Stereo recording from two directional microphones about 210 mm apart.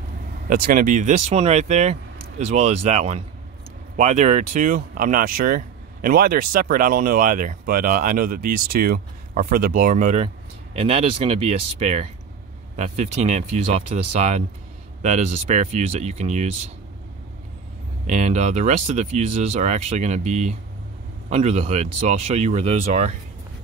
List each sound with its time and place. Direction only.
0.5 s speech: 40° right (ahead or behind)
18.0 s speech: 35° right (ahead or behind)